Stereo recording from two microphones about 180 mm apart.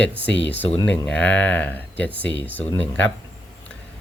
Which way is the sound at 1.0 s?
5° left (ahead or behind).